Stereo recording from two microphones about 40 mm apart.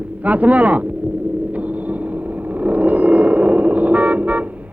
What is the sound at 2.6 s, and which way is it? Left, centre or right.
Toot, right.